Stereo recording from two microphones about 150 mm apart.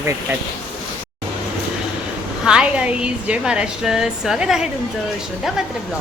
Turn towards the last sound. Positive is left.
turn(degrees=-5)  # may be behind; listen again after turning